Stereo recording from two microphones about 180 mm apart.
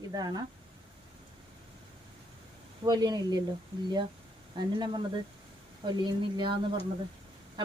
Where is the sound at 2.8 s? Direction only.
20° right (ahead or behind).